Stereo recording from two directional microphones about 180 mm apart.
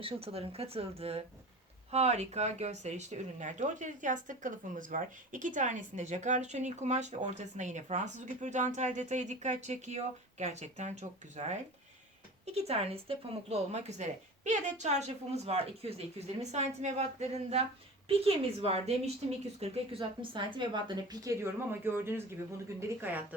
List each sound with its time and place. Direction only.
0.0 s a woman's voice: 30° right (ahead or behind); by 23.2 s 10° right (ahead or behind)